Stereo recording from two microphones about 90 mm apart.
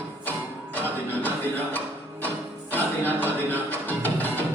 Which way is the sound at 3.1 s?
20° left (ahead or behind).